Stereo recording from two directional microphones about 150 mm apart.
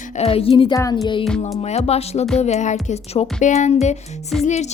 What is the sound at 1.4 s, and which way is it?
A woman's voice, 45° left (ahead or behind).